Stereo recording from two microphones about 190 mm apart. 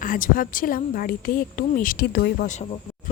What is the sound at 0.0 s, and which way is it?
Speech, 45° left (ahead or behind).